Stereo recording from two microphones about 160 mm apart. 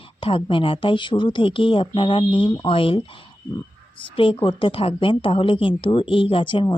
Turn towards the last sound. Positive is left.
turn(degrees=30)  # may be behind; listen again after turning